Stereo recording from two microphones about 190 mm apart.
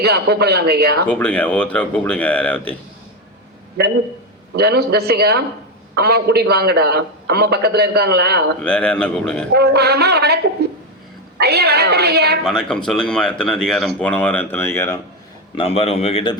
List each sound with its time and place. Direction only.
0.0 s a man's voice: 60° right (ahead or behind)
1.0 s speech: 5° left (ahead or behind)
4.5 s a man's voice: 60° right (ahead or behind)
8.6 s speech: 5° left (ahead or behind)
9.5 s a man's voice: 60° right (ahead or behind)
12.4 s speech: 5° left (ahead or behind)
15.5 s a man's voice: 30° left (ahead or behind)